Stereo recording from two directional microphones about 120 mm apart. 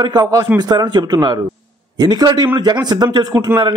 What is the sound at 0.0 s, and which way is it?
Speech, 35° right (ahead or behind).